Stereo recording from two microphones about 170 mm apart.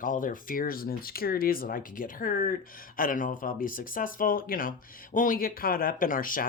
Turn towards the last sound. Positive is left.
turn(degrees=55)  # may be behind; listen again after turning